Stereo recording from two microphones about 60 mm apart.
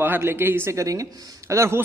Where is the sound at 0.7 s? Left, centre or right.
Right.